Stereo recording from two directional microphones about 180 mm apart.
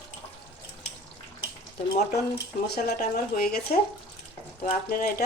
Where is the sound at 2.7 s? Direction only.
55° left (ahead or behind).